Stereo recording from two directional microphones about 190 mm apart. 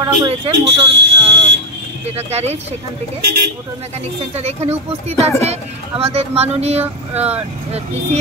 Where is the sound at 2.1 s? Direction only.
35° right (ahead or behind).